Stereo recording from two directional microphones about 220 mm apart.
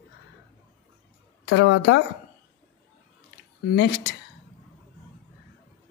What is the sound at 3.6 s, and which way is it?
Speech, 50° left (ahead or behind).